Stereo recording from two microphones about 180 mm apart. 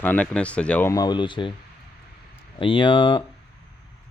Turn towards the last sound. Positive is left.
turn(degrees=25)  # may be behind; listen again after turning